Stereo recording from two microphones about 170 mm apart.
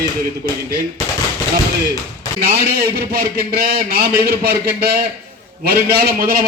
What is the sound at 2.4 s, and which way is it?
A man's voice, 60° right (ahead or behind).